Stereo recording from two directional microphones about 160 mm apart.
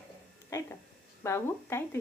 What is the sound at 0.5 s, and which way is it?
A woman's voice, 20° left (ahead or behind).